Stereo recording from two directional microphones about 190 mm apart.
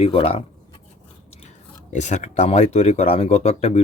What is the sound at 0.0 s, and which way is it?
Speech, 30° left (ahead or behind).